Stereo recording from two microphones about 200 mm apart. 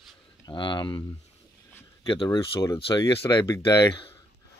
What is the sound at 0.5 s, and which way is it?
Speech, 25° left (ahead or behind).